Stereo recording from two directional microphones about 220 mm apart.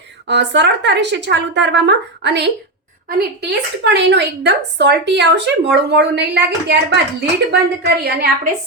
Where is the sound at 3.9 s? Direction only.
50° right (ahead or behind).